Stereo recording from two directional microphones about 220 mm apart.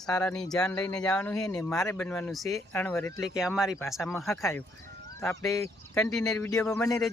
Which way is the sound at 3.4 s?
5° right (ahead or behind).